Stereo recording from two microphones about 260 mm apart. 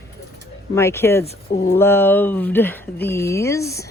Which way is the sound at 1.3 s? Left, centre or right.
Left.